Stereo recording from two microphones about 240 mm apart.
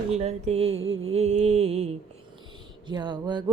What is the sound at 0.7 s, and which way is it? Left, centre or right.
Mantra, right.